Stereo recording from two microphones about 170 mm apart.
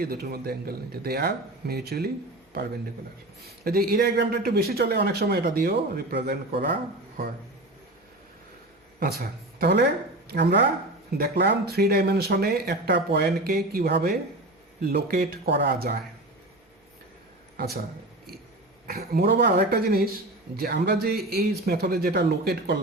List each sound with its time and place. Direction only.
0.0 s a man's voice: 60° right (ahead or behind)
3.6 s a man's voice: 60° right (ahead or behind)
9.0 s speech: 65° right (ahead or behind)
10.2 s speech: 85° right
11.2 s a man's voice: 70° right (ahead or behind)
18.9 s a man's voice: 65° right (ahead or behind); by 22.8 s 80° right